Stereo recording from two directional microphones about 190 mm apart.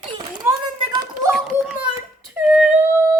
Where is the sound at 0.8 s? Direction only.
20° right (ahead or behind).